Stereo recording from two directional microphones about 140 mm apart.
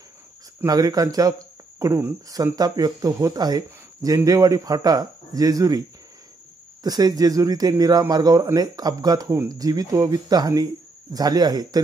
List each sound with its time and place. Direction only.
0.6 s speech: 25° right (ahead or behind)